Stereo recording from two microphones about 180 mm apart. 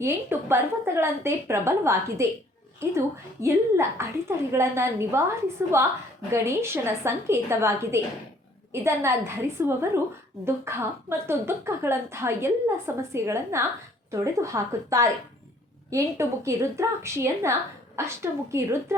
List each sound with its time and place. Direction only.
0.0 s speech: 15° right (ahead or behind)
3.4 s speech: 15° right (ahead or behind)